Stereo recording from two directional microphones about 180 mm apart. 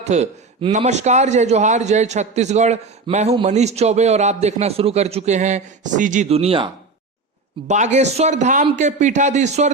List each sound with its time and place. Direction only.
0.0 s a man's voice: 40° right (ahead or behind)
7.9 s a man's voice: 40° right (ahead or behind)